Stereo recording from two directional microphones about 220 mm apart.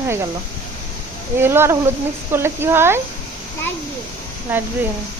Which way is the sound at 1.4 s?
10° right (ahead or behind).